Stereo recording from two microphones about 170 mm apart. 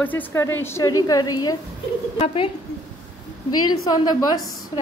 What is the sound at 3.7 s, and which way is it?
Speech, 25° left (ahead or behind).